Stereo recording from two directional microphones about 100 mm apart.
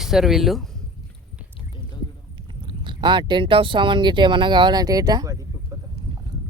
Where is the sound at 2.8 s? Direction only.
50° right (ahead or behind).